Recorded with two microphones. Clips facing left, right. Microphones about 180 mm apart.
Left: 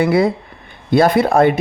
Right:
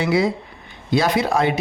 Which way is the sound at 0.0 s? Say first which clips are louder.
Left 5 dB; 55° left (ahead or behind).